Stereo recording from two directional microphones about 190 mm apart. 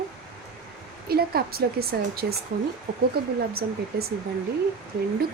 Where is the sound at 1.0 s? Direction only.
55° right (ahead or behind).